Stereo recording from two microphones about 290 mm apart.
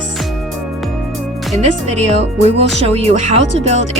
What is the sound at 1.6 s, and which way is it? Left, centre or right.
Speech, right.